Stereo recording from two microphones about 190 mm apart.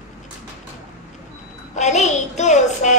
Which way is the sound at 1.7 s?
40° left (ahead or behind).